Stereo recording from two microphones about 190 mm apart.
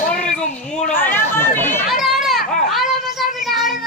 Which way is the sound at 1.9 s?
Centre (ahead or behind).